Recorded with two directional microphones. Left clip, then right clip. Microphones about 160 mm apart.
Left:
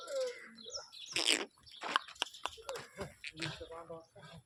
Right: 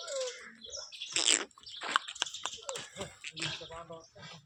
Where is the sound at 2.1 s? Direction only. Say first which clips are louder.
Right 3 dB; 10° left (ahead or behind).